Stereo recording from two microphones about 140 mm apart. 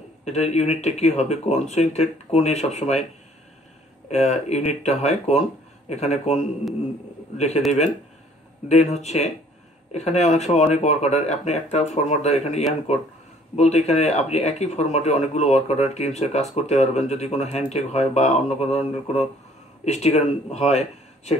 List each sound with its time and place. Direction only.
0.2 s speech: 50° left (ahead or behind)
4.1 s speech: 55° left (ahead or behind)
8.6 s speech: 55° left (ahead or behind)